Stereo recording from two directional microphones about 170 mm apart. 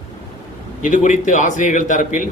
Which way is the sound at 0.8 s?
50° left (ahead or behind).